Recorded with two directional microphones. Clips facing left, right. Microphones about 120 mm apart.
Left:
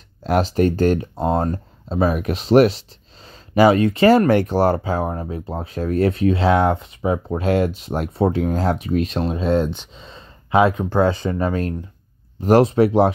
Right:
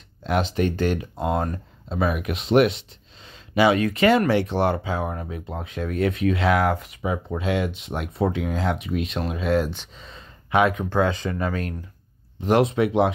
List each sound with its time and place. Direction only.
0.2 s speech: 40° left (ahead or behind)